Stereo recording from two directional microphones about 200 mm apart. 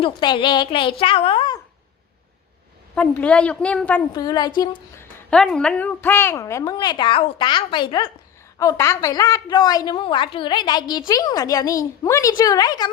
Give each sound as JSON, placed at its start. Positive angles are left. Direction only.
{"t": 0.0, "sound": "a woman's voice", "side_deg": 25}
{"t": 2.9, "sound": "a woman's voice", "side_deg": 5}
{"t": 4.1, "sound": "a woman's voice", "side_deg": 20}
{"t": 5.3, "sound": "a woman's voice", "side_deg": 0}